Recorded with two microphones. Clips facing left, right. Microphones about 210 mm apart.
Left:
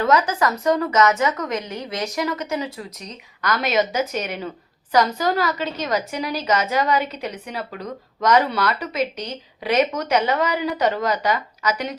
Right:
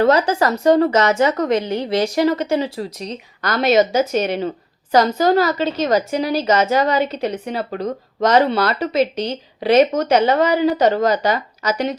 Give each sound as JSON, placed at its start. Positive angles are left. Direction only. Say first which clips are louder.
{"t": 0.0, "sound": "a woman's voice", "louder": "right 4 dB", "side_deg": -30}
{"t": 7.7, "sound": "speech", "louder": "right 8 dB", "side_deg": -45}
{"t": 8.2, "sound": "a woman's voice", "louder": "right 4 dB", "side_deg": -30}